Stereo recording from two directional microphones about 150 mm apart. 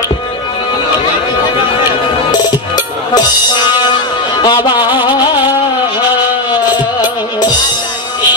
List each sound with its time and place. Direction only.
2.7 s music: 25° left (ahead or behind)